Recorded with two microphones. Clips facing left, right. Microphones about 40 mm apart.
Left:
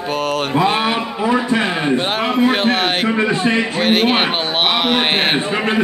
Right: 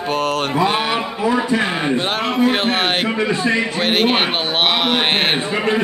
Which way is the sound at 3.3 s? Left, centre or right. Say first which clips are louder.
Left 1 dB; left.